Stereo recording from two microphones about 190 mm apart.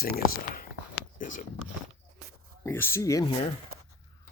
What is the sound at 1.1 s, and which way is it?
Speech, 45° left (ahead or behind).